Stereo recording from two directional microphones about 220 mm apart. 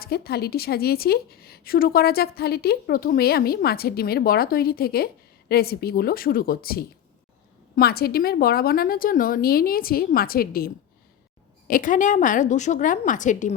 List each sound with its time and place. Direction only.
0.0 s a woman's voice: 45° left (ahead or behind)
11.7 s a woman's voice: 35° left (ahead or behind)